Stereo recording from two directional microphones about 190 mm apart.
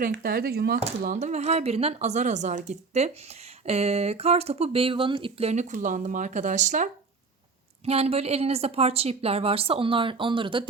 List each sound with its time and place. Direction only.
0.1 s speech: 55° right (ahead or behind)
1.0 s speech: 40° right (ahead or behind)